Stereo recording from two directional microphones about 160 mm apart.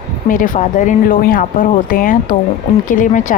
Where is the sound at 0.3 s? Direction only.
55° left (ahead or behind).